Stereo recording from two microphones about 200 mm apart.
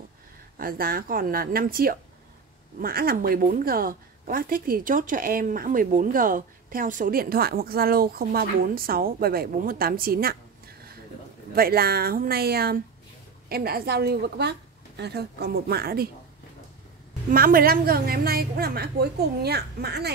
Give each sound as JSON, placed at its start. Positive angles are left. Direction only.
{"t": 0.6, "sound": "a woman's voice", "side_deg": -45}
{"t": 11.5, "sound": "a woman's voice", "side_deg": -50}
{"t": 17.3, "sound": "a woman's voice", "side_deg": -45}